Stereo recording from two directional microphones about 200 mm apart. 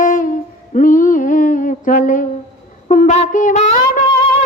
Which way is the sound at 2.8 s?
40° left (ahead or behind).